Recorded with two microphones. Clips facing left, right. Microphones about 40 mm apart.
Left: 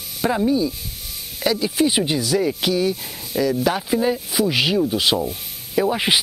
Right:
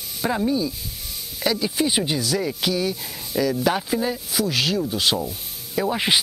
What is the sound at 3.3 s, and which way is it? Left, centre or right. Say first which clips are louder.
Speech: left 1 dB; left.